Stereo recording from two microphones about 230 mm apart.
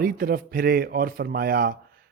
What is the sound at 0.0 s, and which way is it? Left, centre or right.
Speech, right.